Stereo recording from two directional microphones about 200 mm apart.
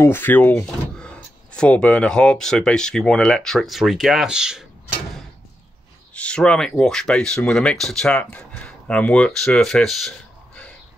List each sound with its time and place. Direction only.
0.0 s speech: 10° left (ahead or behind)
6.1 s speech: 5° left (ahead or behind)